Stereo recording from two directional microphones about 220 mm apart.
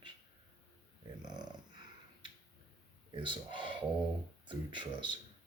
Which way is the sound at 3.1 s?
20° right (ahead or behind).